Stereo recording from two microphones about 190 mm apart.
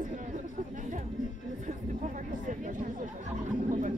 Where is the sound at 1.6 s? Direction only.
40° right (ahead or behind).